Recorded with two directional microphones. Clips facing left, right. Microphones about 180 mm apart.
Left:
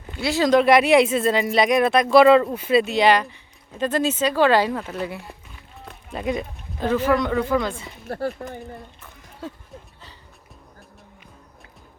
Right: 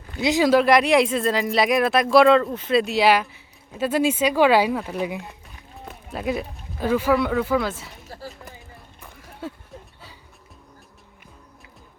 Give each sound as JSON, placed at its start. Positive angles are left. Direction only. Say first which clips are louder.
{"t": 0.2, "sound": "speech", "louder": "right 2 dB", "side_deg": -20}
{"t": 0.4, "sound": "speech", "louder": "left 2 dB", "side_deg": -5}
{"t": 5.8, "sound": "speech", "louder": "even", "side_deg": -5}
{"t": 8.0, "sound": "speech", "louder": "left 13 dB", "side_deg": 60}